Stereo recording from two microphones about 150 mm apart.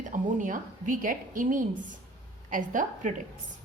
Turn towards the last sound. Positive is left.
turn(degrees=-60)  # may be behind; listen again after turning